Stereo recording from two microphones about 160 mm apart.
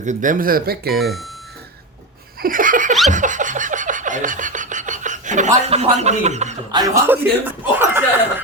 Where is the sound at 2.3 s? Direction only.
60° right (ahead or behind).